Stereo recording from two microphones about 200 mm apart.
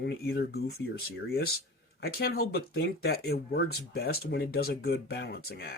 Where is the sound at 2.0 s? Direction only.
50° left (ahead or behind).